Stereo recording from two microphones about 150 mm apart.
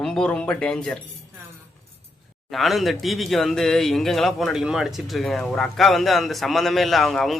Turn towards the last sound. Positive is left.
turn(degrees=0)  # may be behind; listen again after turning